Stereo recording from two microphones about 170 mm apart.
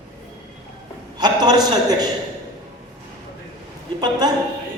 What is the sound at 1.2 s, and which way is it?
Speech, 25° right (ahead or behind).